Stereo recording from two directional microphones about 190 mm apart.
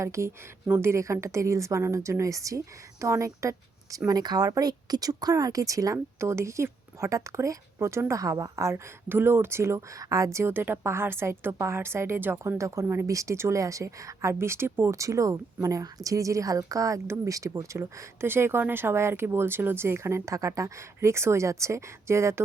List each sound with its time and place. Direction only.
0.0 s speech: 15° right (ahead or behind)